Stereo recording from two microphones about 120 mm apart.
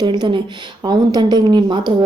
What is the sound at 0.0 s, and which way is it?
A woman's voice, 40° right (ahead or behind).